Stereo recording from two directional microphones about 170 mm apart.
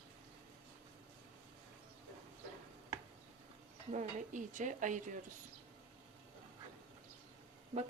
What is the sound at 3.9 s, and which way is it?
Speech, 45° right (ahead or behind).